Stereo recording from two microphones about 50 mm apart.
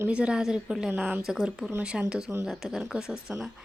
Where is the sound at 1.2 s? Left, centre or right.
Centre.